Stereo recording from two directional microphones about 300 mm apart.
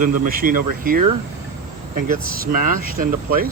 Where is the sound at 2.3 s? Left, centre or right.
Right.